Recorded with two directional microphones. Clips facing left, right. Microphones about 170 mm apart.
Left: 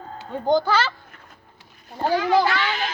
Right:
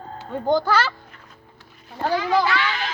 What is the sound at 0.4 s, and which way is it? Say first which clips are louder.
Speech: even; 5° right (ahead or behind).